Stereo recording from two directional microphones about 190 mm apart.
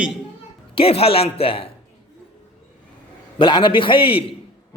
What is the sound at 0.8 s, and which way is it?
Speech, 30° left (ahead or behind).